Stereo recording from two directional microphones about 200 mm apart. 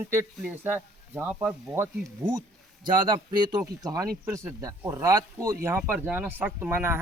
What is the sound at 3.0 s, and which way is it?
Speech, 25° right (ahead or behind).